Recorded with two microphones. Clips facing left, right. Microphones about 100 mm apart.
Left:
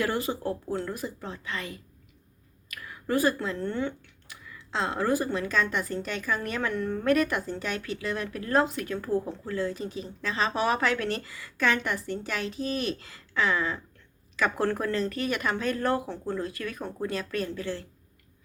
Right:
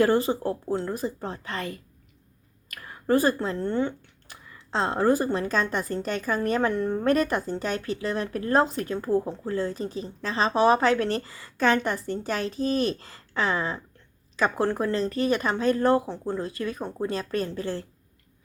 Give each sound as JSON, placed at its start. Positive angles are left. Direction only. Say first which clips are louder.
{"t": 0.0, "sound": "speech", "louder": "right 7 dB", "side_deg": -30}